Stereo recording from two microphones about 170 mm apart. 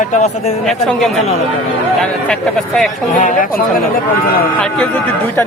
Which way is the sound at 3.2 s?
50° left (ahead or behind).